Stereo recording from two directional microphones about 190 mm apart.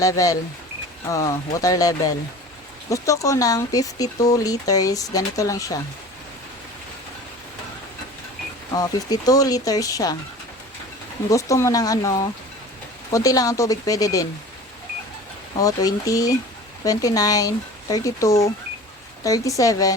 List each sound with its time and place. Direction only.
0.0 s speech: 20° left (ahead or behind)
8.7 s speech: 20° left (ahead or behind)
11.3 s speech: 15° left (ahead or behind)
15.5 s speech: 20° left (ahead or behind)